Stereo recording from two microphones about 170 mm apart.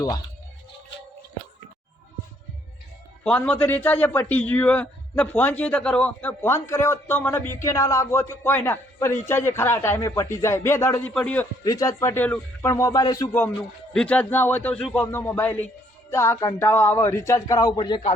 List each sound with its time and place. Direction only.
3.2 s a man's voice: 5° left (ahead or behind)
11.6 s a man's voice: 20° left (ahead or behind)